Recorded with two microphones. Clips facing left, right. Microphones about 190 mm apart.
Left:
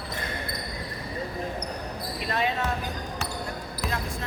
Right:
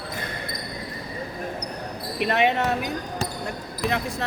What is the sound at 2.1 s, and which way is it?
Speech, 70° right (ahead or behind).